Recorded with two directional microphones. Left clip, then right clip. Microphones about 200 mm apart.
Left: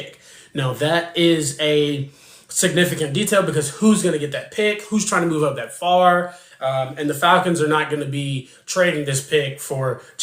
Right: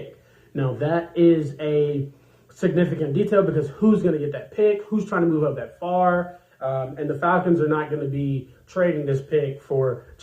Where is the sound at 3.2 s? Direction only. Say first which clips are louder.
Left 2 dB; 20° left (ahead or behind).